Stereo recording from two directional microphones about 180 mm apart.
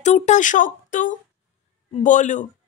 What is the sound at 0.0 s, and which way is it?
A man's voice, 40° left (ahead or behind).